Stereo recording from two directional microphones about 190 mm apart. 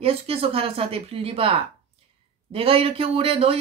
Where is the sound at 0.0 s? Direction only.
30° right (ahead or behind).